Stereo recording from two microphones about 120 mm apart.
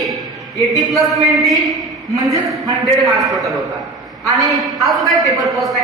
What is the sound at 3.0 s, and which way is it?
A woman's voice, centre (ahead or behind).